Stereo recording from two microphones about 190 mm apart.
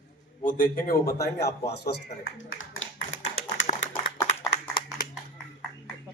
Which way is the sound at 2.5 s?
90° left.